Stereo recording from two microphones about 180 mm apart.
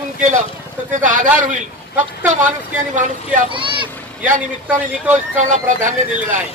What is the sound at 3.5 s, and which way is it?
Speech, 30° right (ahead or behind).